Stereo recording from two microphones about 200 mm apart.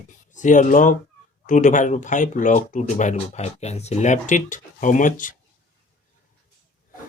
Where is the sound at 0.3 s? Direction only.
40° left (ahead or behind).